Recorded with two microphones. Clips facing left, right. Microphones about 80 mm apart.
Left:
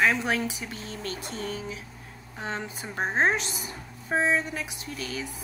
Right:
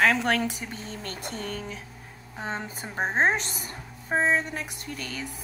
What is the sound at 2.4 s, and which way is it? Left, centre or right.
Speech, centre.